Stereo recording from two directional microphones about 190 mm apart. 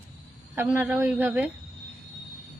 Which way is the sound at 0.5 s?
10° right (ahead or behind).